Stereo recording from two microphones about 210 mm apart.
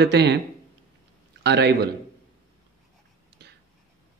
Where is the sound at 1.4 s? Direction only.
50° right (ahead or behind).